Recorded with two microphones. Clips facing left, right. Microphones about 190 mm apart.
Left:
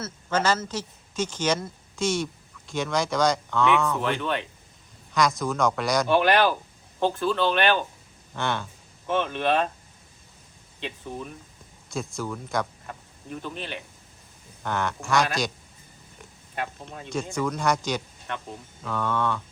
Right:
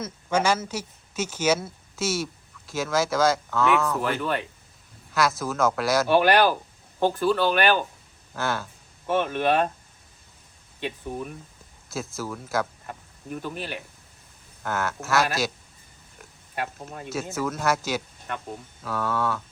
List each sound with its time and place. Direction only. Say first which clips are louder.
0.0 s speech: right 1 dB; 10° right (ahead or behind)
10.8 s a man's voice: right 3 dB; 5° right (ahead or behind)
16.6 s speech: right 1 dB; 5° right (ahead or behind)